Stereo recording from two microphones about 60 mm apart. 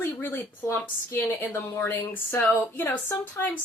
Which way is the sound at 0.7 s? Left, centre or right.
Left.